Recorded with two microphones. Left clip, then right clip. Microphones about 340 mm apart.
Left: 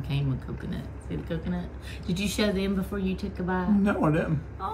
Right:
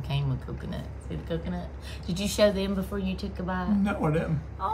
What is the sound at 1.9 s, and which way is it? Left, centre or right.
A woman's voice, centre.